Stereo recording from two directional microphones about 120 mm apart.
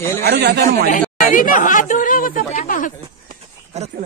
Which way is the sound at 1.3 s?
90° left.